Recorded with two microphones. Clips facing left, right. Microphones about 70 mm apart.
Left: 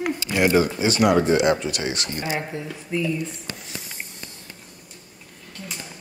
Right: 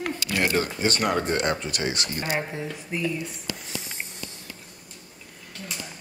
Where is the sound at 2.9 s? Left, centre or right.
Centre.